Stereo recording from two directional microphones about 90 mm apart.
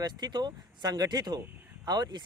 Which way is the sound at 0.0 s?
50° right (ahead or behind).